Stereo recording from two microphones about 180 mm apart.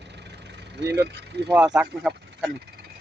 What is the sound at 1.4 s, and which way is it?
Speech, 5° right (ahead or behind).